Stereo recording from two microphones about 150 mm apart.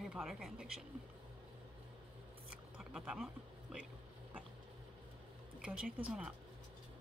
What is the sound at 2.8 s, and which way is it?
Speech, 5° right (ahead or behind).